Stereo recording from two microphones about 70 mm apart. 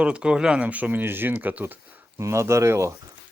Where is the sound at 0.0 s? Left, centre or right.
Centre.